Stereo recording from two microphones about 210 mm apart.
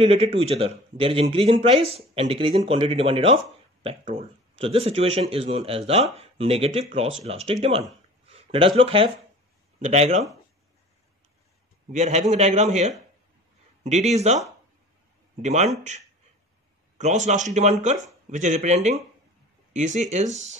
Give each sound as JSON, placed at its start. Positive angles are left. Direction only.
{"t": 0.0, "sound": "a man's voice", "side_deg": -25}
{"t": 11.9, "sound": "a man's voice", "side_deg": -30}
{"t": 15.4, "sound": "a man's voice", "side_deg": -35}
{"t": 17.0, "sound": "a man's voice", "side_deg": -35}